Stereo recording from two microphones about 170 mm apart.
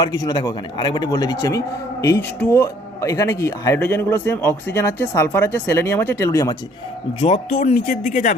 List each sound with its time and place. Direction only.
0.0 s a man's voice: 25° left (ahead or behind)
7.2 s speech: 40° left (ahead or behind)
7.5 s speech: 50° left (ahead or behind)